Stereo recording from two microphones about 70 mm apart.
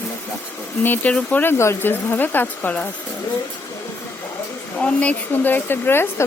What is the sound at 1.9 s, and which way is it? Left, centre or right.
Speech, left.